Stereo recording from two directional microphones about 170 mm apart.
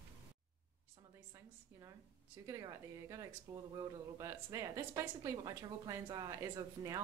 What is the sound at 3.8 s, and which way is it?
Speech, 20° right (ahead or behind).